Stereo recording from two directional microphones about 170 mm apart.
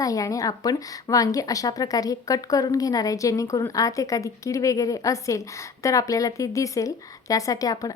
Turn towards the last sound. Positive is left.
turn(degrees=20)  # may be behind; listen again after turning